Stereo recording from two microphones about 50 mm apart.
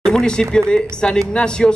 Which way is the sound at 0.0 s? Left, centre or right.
Centre.